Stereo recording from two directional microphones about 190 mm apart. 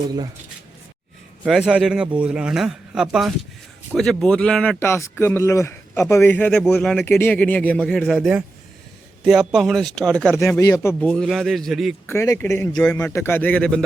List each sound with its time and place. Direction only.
1.5 s a man's voice: centre (ahead or behind)
10.6 s speech: 15° left (ahead or behind)
11.0 s a man's voice: 5° left (ahead or behind)
12.0 s speech: 15° left (ahead or behind)